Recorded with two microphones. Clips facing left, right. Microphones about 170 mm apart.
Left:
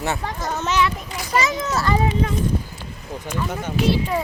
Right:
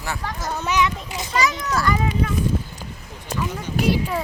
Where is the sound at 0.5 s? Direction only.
15° right (ahead or behind).